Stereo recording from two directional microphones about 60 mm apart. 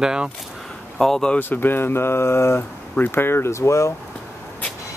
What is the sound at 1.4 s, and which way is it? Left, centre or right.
Speech, left.